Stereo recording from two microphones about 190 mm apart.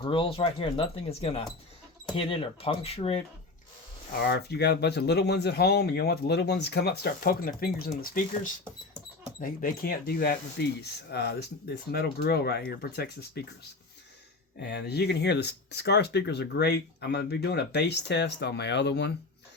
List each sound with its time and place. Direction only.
0.0 s speech: 25° left (ahead or behind)
4.2 s speech: 60° left (ahead or behind)
9.4 s speech: 50° left (ahead or behind)
14.6 s speech: 60° left (ahead or behind)